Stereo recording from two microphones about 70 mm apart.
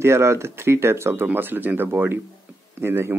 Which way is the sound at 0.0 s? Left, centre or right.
Right.